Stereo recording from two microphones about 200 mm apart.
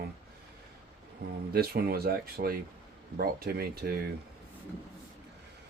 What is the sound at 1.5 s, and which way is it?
Speech, 50° right (ahead or behind).